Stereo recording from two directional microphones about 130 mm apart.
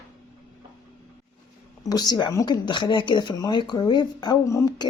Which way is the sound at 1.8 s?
30° left (ahead or behind).